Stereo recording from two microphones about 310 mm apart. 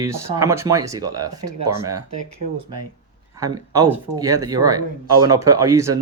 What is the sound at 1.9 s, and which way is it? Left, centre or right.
Speech, right.